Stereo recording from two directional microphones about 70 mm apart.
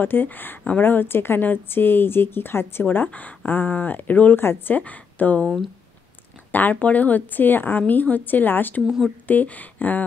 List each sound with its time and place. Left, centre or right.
0.0 s a woman's voice: left
4.7 s a woman's voice: left
6.5 s a woman's voice: left